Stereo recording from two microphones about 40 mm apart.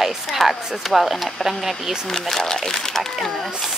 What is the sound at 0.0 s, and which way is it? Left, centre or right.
Speech, centre.